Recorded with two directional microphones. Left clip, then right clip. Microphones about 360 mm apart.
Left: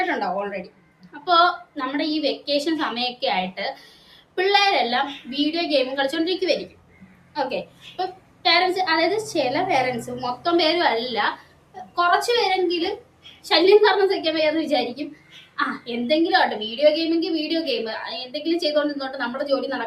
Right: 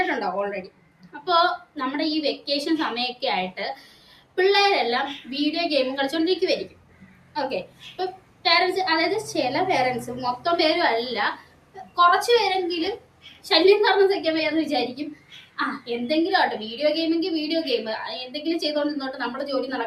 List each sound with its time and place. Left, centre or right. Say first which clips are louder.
0.1 s a woman's voice: left 1 dB; centre